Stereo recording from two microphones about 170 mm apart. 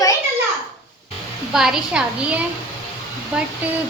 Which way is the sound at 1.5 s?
5° right (ahead or behind).